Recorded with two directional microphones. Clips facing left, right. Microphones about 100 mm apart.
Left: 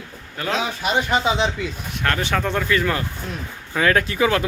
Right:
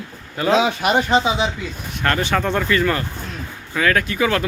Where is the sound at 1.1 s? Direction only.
25° right (ahead or behind).